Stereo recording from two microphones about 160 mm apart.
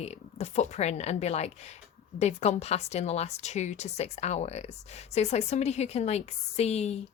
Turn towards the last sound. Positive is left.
turn(degrees=40)  # may be behind; listen again after turning